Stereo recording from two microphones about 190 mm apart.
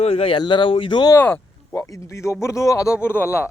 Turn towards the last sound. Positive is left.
turn(degrees=10)  # may be behind; listen again after turning